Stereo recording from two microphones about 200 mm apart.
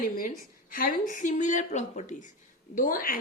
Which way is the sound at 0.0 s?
45° left (ahead or behind).